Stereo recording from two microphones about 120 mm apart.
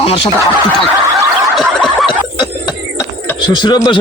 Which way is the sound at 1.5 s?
Centre (ahead or behind).